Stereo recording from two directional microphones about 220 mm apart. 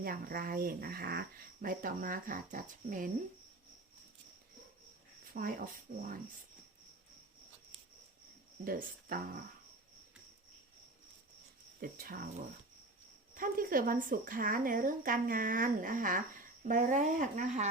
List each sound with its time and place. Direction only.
0.0 s speech: 40° right (ahead or behind)
5.3 s speech: 40° right (ahead or behind)
8.6 s speech: 40° right (ahead or behind)
11.8 s speech: 40° right (ahead or behind)
13.3 s speech: 40° right (ahead or behind)